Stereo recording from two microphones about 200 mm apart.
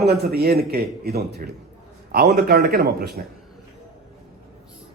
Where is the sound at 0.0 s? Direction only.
50° right (ahead or behind).